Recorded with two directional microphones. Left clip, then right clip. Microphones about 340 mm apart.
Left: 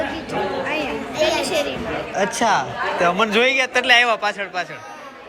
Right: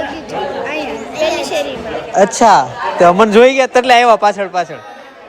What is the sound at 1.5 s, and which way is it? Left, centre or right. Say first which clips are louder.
Speech: right 4 dB; right.